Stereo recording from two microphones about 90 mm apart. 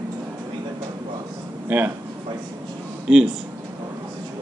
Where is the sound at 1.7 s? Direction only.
15° right (ahead or behind).